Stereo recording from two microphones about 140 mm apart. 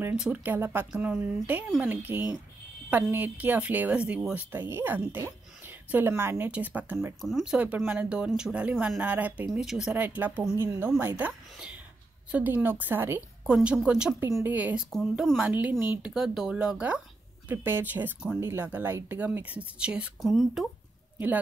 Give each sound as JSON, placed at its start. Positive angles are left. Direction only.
{"t": 0.0, "sound": "speech", "side_deg": -10}
{"t": 7.2, "sound": "speech", "side_deg": 0}
{"t": 14.9, "sound": "speech", "side_deg": 0}
{"t": 16.1, "sound": "speech", "side_deg": -5}